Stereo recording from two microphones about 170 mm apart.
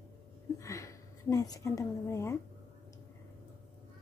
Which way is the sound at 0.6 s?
20° left (ahead or behind).